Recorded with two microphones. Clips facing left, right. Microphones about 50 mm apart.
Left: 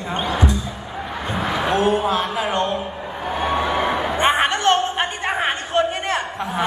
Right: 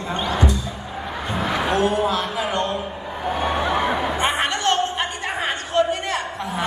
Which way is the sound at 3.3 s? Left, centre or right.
Centre.